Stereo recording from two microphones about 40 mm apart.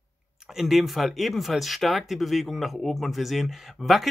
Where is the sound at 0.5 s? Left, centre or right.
Centre.